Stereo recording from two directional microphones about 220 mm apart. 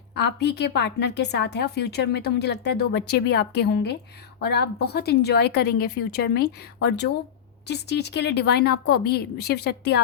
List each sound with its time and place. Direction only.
0.1 s a woman's voice: 50° left (ahead or behind)